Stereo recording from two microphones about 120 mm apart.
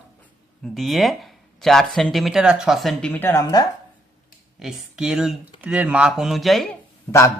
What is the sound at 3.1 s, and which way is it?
Speech, 20° left (ahead or behind).